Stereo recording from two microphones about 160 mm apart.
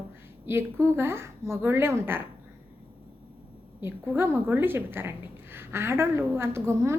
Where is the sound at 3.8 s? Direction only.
15° right (ahead or behind).